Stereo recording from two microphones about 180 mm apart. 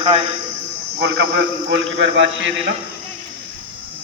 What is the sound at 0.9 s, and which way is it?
A man's voice, 70° right (ahead or behind).